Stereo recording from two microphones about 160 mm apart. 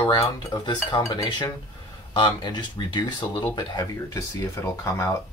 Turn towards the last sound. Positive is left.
turn(degrees=20)  # may be behind; listen again after turning